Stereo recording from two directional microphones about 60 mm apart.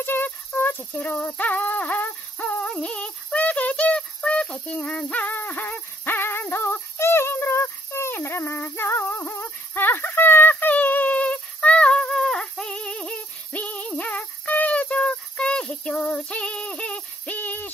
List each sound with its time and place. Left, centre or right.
0.0 s a sound: left
2.6 s synthetic singing: centre
4.8 s music: left
17.4 s hoot: left